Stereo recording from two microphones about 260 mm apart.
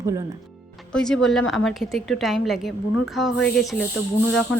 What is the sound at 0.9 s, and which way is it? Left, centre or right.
Speech, centre.